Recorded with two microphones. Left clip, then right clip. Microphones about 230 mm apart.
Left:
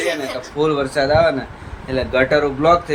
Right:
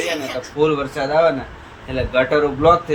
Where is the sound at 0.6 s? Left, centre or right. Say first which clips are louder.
Right 1 dB; centre.